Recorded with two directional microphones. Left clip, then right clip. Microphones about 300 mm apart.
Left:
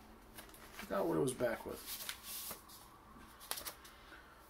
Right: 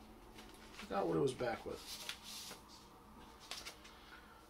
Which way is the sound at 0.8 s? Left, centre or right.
Centre.